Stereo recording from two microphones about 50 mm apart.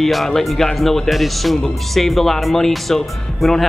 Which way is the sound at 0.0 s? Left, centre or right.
Centre.